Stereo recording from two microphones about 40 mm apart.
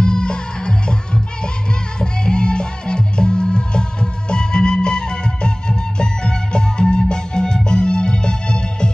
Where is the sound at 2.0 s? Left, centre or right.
Left.